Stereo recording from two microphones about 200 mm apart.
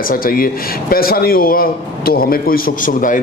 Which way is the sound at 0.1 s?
45° left (ahead or behind).